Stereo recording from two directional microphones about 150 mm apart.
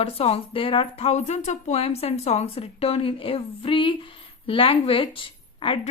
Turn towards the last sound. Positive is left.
turn(degrees=35)  # may be behind; listen again after turning